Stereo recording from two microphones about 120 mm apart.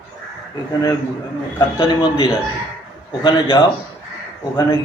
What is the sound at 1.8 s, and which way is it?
A man's voice, 45° left (ahead or behind).